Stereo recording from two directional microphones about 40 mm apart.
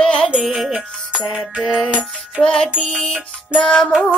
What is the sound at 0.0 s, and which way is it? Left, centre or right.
Music, centre.